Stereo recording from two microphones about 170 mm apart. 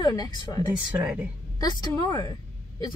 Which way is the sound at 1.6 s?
25° left (ahead or behind).